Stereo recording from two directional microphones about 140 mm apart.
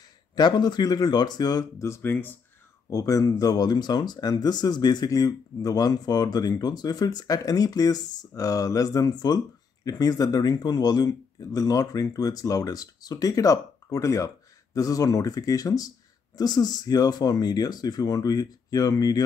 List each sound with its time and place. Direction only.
0.4 s speech: 30° left (ahead or behind)